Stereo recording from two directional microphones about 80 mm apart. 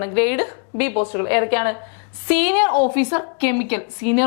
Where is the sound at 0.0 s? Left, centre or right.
Centre.